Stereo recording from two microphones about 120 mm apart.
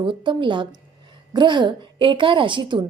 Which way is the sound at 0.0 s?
40° right (ahead or behind).